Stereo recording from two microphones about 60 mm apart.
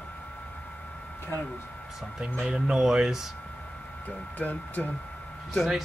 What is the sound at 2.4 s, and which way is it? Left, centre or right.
Speech, centre.